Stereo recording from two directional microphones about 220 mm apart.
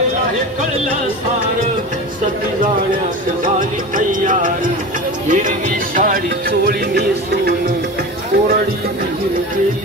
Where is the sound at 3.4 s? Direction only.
35° right (ahead or behind).